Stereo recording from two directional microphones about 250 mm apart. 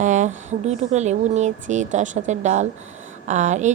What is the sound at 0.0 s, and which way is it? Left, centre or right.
A woman's voice, right.